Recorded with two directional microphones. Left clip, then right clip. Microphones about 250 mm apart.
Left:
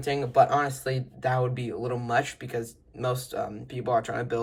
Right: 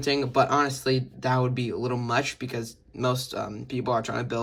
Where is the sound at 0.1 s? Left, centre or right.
Right.